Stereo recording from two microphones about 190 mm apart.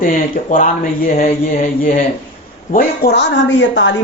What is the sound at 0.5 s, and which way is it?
Speech, 50° left (ahead or behind).